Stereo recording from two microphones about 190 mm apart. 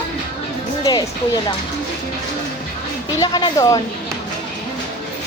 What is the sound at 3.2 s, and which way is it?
Speech, 20° left (ahead or behind).